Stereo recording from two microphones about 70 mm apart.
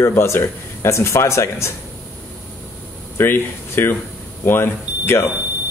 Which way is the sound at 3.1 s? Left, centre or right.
Left.